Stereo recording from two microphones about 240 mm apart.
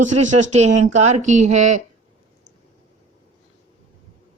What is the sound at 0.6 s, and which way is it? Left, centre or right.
Speech, right.